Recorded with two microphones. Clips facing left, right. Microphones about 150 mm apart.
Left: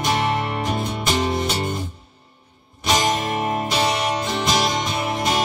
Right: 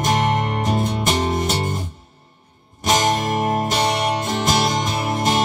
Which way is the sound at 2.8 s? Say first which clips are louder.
Right 2 dB; 45° right (ahead or behind).